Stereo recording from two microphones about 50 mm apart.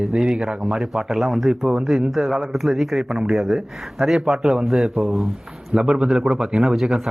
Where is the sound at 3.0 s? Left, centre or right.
Centre.